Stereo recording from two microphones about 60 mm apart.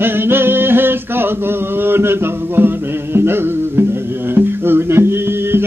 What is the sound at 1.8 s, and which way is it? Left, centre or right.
Music, right.